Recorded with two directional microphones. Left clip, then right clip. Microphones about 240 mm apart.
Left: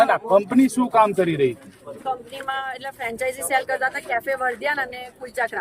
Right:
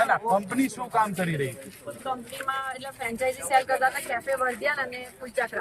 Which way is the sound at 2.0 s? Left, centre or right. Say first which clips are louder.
Left 4 dB; left.